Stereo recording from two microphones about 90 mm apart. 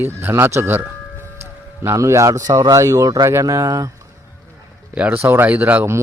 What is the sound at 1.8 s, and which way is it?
Speech, 35° right (ahead or behind).